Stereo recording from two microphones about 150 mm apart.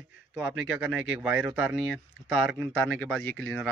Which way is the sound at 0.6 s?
5° right (ahead or behind).